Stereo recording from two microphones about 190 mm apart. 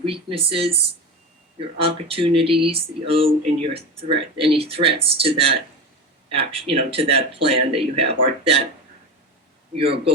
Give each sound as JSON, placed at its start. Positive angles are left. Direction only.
{"t": 0.0, "sound": "speech", "side_deg": -30}
{"t": 9.7, "sound": "speech", "side_deg": -30}